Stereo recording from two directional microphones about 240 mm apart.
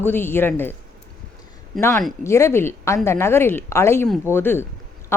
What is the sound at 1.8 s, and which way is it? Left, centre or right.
A woman's voice, centre.